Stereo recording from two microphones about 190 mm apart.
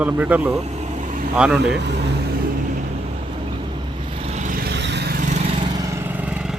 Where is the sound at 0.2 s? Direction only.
10° right (ahead or behind).